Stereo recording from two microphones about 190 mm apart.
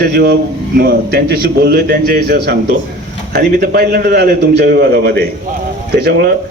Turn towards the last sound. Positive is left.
turn(degrees=-55)  # may be behind; listen again after turning